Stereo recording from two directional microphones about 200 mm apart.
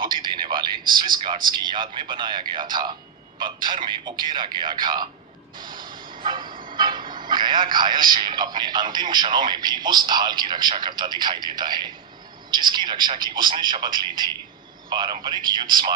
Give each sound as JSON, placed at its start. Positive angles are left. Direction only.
{"t": 0.0, "sound": "a sound", "side_deg": -25}
{"t": 1.5, "sound": "a man's voice", "side_deg": -25}
{"t": 5.8, "sound": "bow-wow", "side_deg": -25}
{"t": 6.7, "sound": "a man's voice", "side_deg": -20}